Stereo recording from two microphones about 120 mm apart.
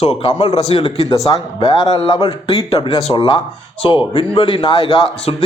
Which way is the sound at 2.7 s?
50° left (ahead or behind).